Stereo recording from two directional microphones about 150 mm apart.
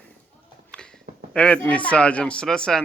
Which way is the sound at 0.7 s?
5° left (ahead or behind).